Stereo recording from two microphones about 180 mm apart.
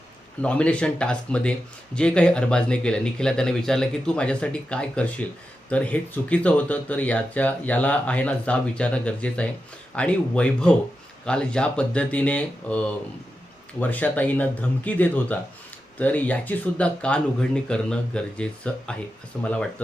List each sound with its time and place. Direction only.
0.4 s speech: 5° left (ahead or behind)